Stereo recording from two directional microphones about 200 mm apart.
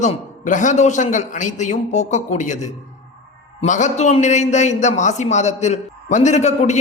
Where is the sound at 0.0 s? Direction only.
40° left (ahead or behind).